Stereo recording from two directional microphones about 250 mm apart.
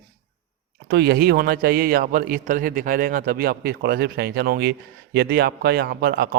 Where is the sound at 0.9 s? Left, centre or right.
Right.